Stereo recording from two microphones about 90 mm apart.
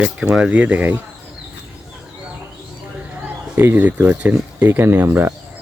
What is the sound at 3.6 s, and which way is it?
Speech, 20° right (ahead or behind).